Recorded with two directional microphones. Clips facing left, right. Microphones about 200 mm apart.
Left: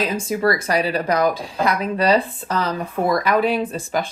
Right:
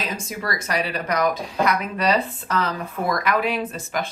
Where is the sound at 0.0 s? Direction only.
30° left (ahead or behind).